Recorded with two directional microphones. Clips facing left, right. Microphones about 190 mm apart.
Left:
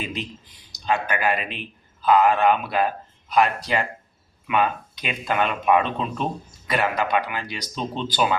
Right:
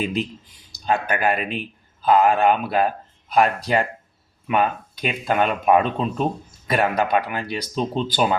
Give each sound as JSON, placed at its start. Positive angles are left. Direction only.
{"t": 0.9, "sound": "speech", "side_deg": -45}